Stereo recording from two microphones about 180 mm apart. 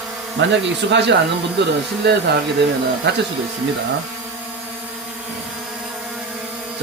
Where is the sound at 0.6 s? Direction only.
75° right (ahead or behind).